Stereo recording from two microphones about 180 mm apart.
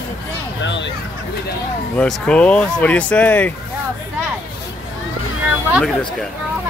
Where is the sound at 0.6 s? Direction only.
80° left.